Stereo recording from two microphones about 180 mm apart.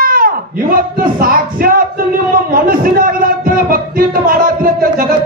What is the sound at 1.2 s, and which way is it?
Music, 55° right (ahead or behind).